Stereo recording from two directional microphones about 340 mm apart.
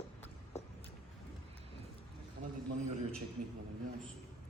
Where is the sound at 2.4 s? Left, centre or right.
Right.